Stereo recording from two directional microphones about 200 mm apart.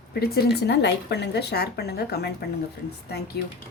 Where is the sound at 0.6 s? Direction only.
60° left (ahead or behind).